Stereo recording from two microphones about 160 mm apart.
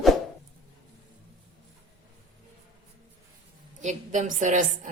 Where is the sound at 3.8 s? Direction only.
50° right (ahead or behind).